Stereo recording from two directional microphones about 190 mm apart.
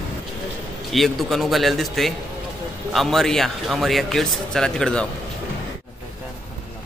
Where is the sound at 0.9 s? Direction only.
Centre (ahead or behind).